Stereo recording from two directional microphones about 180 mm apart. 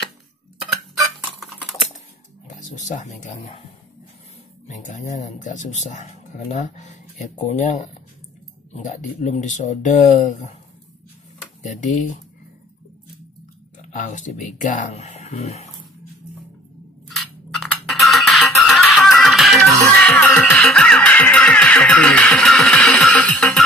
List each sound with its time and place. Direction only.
1.4 s typing: centre (ahead or behind)
2.4 s speech: 40° left (ahead or behind)
4.6 s speech: 45° left (ahead or behind)
11.6 s speech: 45° left (ahead or behind)
13.7 s speech: 45° left (ahead or behind)
17.1 s music: centre (ahead or behind)